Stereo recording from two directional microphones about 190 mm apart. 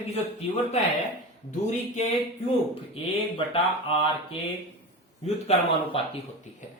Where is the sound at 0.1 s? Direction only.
35° left (ahead or behind).